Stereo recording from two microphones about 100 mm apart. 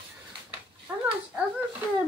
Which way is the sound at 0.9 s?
20° right (ahead or behind).